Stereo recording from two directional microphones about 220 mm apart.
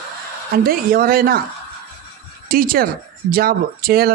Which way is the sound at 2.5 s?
40° right (ahead or behind).